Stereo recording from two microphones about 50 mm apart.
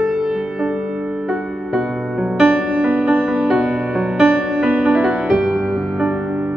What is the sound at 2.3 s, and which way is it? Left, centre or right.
Music, right.